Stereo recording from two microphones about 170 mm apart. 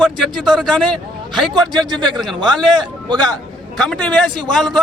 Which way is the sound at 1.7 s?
25° right (ahead or behind).